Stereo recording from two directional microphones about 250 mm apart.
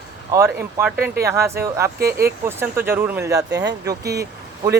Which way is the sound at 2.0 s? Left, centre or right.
Right.